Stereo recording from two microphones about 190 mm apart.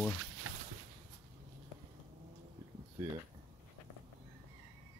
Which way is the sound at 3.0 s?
15° right (ahead or behind).